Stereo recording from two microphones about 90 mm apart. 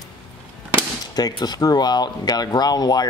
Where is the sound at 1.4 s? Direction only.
45° left (ahead or behind).